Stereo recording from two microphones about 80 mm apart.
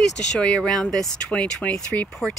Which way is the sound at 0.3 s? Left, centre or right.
Centre.